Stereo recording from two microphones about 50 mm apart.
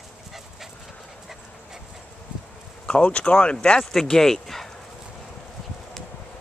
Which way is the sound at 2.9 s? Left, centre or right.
Left.